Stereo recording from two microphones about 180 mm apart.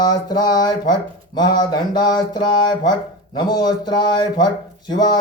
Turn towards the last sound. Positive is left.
turn(degrees=25)  # may be behind; listen again after turning